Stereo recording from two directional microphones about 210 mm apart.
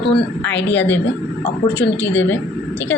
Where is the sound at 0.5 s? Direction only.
60° left (ahead or behind).